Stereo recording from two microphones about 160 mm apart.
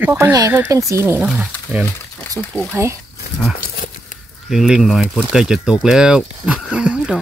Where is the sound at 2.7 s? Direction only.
15° right (ahead or behind).